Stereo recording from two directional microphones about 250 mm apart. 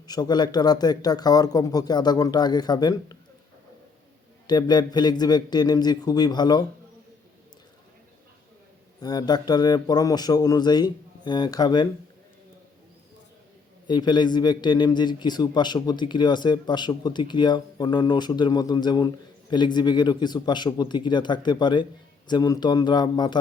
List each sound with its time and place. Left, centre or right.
0.1 s a man's voice: centre
4.4 s a man's voice: centre
9.0 s a man's voice: centre
13.8 s a man's voice: centre